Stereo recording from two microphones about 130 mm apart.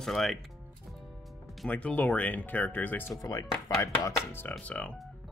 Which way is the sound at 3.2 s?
25° left (ahead or behind).